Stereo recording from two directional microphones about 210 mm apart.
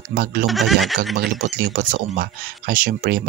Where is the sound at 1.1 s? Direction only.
45° right (ahead or behind).